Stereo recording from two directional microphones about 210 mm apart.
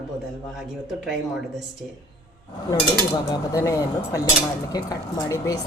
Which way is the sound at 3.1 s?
15° left (ahead or behind).